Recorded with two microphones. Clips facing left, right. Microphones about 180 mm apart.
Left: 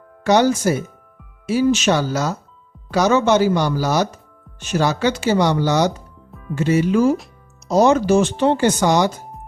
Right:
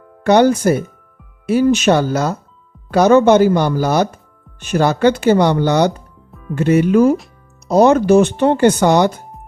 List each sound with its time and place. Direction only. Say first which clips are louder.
0.3 s speech: right 4 dB; 55° right (ahead or behind)